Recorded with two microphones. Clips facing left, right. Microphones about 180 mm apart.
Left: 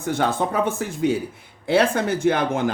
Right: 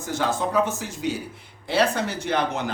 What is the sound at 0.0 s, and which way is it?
Speech, 60° left (ahead or behind).